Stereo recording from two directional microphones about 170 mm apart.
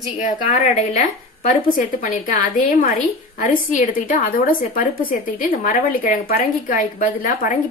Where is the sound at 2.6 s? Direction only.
55° left (ahead or behind).